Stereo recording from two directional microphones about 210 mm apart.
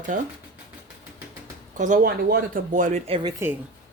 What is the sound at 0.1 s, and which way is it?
Speech, 40° right (ahead or behind).